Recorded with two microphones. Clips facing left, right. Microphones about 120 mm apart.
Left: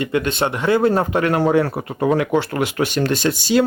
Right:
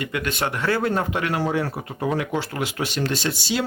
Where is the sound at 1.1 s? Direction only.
45° left (ahead or behind).